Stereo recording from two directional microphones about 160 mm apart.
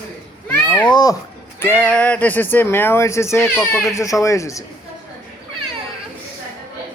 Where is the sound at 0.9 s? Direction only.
25° left (ahead or behind).